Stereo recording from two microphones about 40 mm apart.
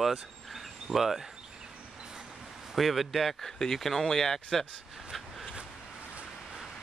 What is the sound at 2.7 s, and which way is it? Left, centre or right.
Speech, centre.